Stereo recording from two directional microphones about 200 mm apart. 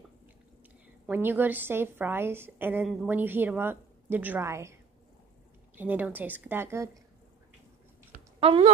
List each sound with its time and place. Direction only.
1.0 s a woman's voice: 10° right (ahead or behind)
5.8 s a woman's voice: 10° right (ahead or behind)
8.4 s speech: 30° right (ahead or behind)